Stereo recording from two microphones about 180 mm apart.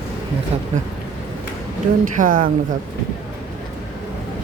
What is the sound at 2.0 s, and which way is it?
Speech, 50° right (ahead or behind).